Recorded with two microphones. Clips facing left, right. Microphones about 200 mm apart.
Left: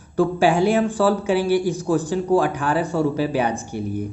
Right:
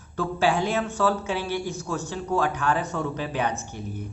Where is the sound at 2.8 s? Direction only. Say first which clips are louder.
Left 8 dB; 30° left (ahead or behind).